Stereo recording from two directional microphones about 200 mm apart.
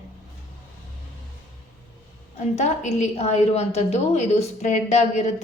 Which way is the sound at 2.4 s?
35° left (ahead or behind).